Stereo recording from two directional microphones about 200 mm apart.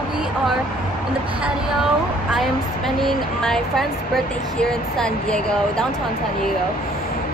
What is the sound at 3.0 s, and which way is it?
Speech, centre (ahead or behind).